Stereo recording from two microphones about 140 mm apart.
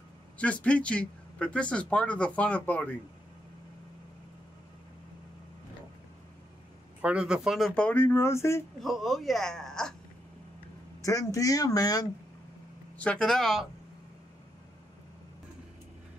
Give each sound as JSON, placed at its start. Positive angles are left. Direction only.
{"t": 0.4, "sound": "speech", "side_deg": 10}
{"t": 7.0, "sound": "speech", "side_deg": -10}
{"t": 8.8, "sound": "speech", "side_deg": 0}
{"t": 11.0, "sound": "speech", "side_deg": 25}
{"t": 12.9, "sound": "speech", "side_deg": 10}